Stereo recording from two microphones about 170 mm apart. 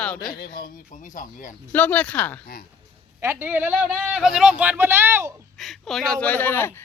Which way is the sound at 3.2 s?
15° right (ahead or behind).